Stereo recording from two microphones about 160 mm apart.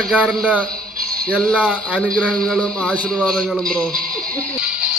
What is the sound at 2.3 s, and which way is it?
Speech, 5° left (ahead or behind).